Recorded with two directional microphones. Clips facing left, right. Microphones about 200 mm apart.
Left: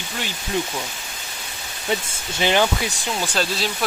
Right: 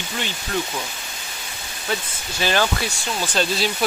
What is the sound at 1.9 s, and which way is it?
Speech, 20° left (ahead or behind).